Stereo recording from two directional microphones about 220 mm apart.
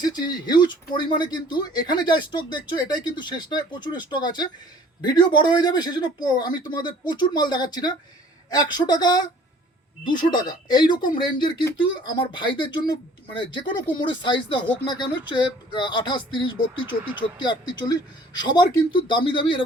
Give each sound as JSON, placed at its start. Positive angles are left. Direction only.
{"t": 0.0, "sound": "speech", "side_deg": 20}
{"t": 10.3, "sound": "speech", "side_deg": 20}